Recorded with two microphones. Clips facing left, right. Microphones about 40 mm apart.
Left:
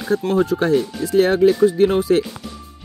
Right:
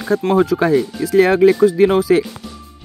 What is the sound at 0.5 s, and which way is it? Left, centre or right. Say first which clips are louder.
Speech: right 3 dB; right.